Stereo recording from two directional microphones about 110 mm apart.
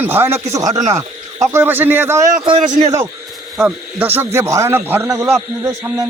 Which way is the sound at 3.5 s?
15° right (ahead or behind).